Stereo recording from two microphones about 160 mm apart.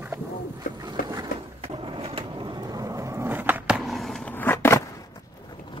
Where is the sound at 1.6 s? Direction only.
35° right (ahead or behind); by 3.8 s 10° right (ahead or behind).